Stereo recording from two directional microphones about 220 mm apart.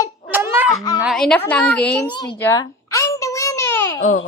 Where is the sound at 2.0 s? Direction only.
20° left (ahead or behind).